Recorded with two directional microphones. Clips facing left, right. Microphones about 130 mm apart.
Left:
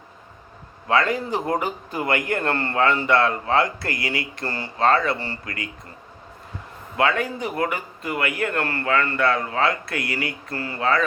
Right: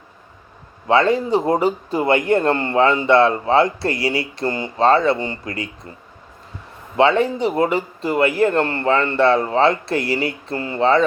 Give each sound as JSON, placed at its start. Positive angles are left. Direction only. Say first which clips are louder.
{"t": 0.9, "sound": "a man's voice", "louder": "right 6 dB", "side_deg": -25}
{"t": 6.9, "sound": "a man's voice", "louder": "right 7 dB", "side_deg": -30}